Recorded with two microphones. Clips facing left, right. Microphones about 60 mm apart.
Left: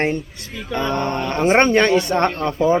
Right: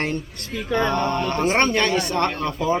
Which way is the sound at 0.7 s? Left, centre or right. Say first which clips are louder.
Right 1 dB; right.